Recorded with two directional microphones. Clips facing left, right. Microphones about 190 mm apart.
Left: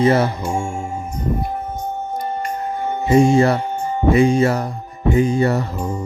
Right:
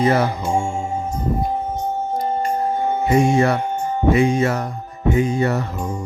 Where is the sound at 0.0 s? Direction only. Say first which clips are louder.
Left 2 dB; 25° left (ahead or behind).